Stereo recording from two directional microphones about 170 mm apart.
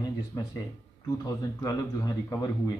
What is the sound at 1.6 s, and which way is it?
Speech, 20° left (ahead or behind).